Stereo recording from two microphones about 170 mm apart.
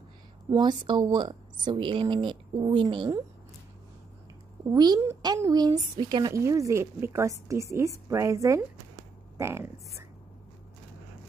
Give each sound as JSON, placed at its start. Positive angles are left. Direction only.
{"t": 0.5, "sound": "a woman's voice", "side_deg": -25}
{"t": 4.6, "sound": "a woman's voice", "side_deg": -25}